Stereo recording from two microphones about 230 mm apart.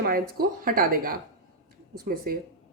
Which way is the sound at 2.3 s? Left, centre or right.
Right.